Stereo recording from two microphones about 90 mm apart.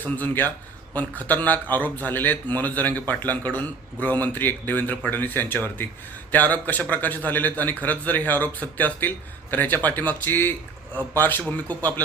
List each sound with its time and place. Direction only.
0.0 s a man's voice: 20° left (ahead or behind)